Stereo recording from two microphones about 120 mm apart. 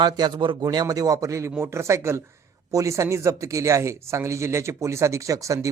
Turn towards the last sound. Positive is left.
turn(degrees=-25)  # may be behind; listen again after turning